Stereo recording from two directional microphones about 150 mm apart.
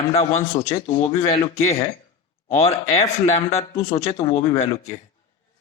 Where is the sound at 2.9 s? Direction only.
50° left (ahead or behind).